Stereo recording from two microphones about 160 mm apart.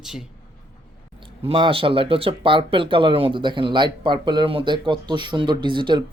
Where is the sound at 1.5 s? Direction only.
35° right (ahead or behind).